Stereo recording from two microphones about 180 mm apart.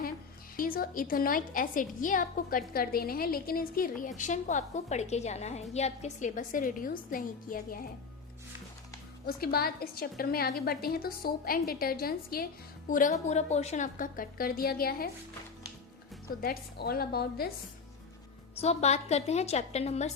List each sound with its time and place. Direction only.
0.5 s a woman's voice: 50° left (ahead or behind)
4.2 s a woman's voice: 40° left (ahead or behind)
9.2 s a woman's voice: 55° left (ahead or behind)
12.9 s a woman's voice: 45° left (ahead or behind)
16.4 s a woman's voice: 55° left (ahead or behind)
18.5 s a woman's voice: 35° left (ahead or behind)